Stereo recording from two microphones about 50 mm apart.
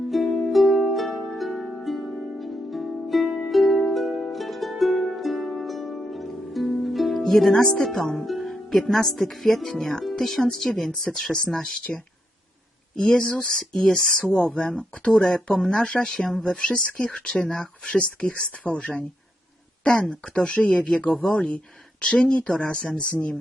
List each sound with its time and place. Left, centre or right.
0.1 s music: centre
5.6 s harp: centre
7.2 s speech: centre
13.0 s speech: centre
20.3 s speech: left